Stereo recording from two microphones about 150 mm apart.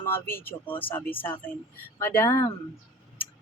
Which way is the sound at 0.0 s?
15° left (ahead or behind).